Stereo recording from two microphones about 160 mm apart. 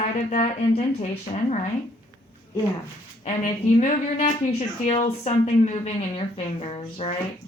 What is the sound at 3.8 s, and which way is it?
A woman's voice, 50° left (ahead or behind).